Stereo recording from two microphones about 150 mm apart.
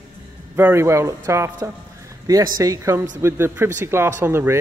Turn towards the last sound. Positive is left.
turn(degrees=-15)  # may be behind; listen again after turning